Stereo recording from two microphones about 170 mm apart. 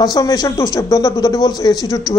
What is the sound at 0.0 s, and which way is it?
A man's voice, 25° left (ahead or behind).